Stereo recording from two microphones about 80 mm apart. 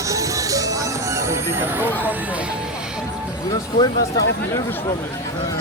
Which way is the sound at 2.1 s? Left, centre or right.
Right.